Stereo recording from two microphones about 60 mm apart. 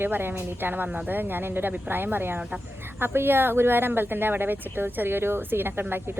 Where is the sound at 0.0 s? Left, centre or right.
Right.